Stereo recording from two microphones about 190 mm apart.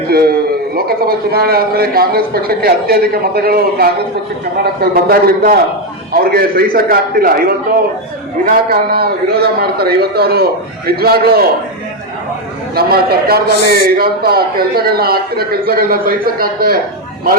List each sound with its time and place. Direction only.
0.1 s a sound: 55° right (ahead or behind)
0.8 s a man's voice: 55° right (ahead or behind)
8.7 s a man's voice: 55° right (ahead or behind)
12.7 s a man's voice: 55° right (ahead or behind)